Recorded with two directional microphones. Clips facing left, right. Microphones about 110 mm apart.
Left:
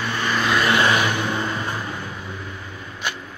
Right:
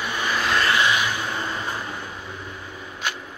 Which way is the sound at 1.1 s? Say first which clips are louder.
Left 4 dB; 20° left (ahead or behind).